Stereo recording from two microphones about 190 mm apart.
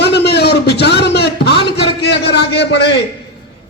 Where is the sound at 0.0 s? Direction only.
60° left (ahead or behind).